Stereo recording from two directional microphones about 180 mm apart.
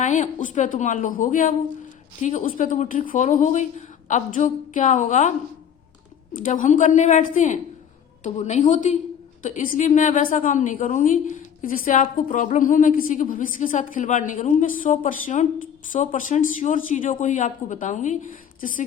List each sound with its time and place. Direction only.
0.0 s a woman's voice: 45° left (ahead or behind)
6.3 s a woman's voice: 50° left (ahead or behind)